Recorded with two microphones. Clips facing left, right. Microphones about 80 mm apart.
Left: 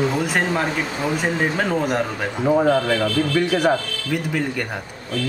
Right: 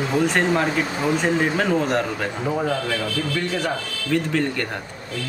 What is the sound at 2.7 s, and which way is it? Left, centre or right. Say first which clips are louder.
A man's voice: left 6 dB; left.